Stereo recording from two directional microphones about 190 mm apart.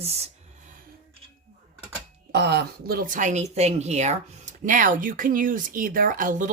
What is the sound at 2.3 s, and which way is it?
Speech, 60° right (ahead or behind).